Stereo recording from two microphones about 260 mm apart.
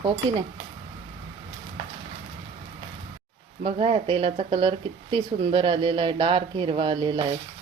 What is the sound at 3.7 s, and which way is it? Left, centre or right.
Speech, right.